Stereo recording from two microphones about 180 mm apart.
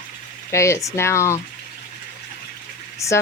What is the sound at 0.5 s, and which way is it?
Speech, 15° left (ahead or behind).